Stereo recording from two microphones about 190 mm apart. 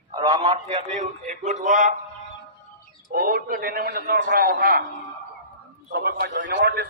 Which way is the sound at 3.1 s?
50° right (ahead or behind).